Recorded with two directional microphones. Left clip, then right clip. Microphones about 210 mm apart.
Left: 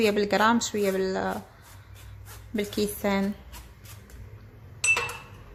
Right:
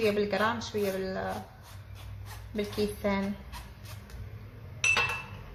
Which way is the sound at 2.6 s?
50° left (ahead or behind).